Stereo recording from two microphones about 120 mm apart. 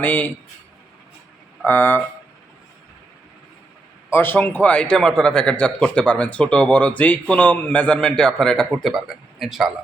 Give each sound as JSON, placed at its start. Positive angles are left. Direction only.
{"t": 0.0, "sound": "a man's voice", "side_deg": 10}
{"t": 1.6, "sound": "a man's voice", "side_deg": 15}
{"t": 4.1, "sound": "a man's voice", "side_deg": 20}